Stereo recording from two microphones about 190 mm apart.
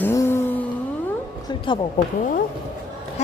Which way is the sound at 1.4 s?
25° left (ahead or behind).